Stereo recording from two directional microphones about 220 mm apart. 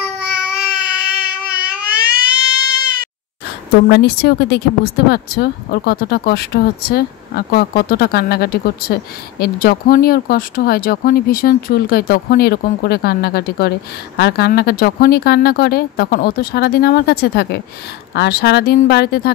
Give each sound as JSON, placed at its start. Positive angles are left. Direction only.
{"t": 0.0, "sound": "baby cry", "side_deg": -5}
{"t": 1.6, "sound": "a sound", "side_deg": -5}
{"t": 3.7, "sound": "speech", "side_deg": 50}